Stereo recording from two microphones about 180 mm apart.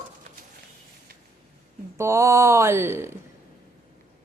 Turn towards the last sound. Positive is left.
turn(degrees=-15)  # may be behind; listen again after turning